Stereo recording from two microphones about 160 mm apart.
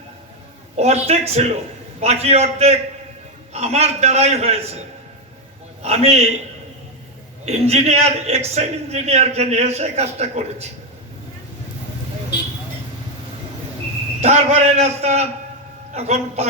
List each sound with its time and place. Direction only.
0.8 s a man's voice: 40° right (ahead or behind)
5.8 s a man's voice: 40° right (ahead or behind)
7.4 s a man's voice: 40° right (ahead or behind)
14.2 s a man's voice: 45° right (ahead or behind)